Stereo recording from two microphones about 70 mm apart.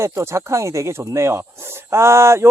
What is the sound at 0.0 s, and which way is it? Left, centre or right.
Speech, right.